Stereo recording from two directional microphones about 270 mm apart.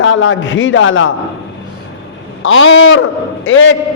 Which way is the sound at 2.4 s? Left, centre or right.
Left.